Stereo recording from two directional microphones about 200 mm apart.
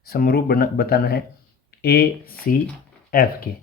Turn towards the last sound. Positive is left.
turn(degrees=45)  # may be behind; listen again after turning